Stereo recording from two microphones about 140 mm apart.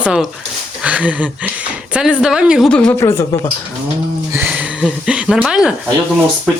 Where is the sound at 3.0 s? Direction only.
20° left (ahead or behind).